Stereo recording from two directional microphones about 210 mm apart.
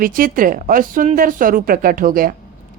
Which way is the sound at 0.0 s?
40° right (ahead or behind).